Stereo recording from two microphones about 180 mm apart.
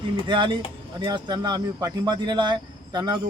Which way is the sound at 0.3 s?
25° right (ahead or behind).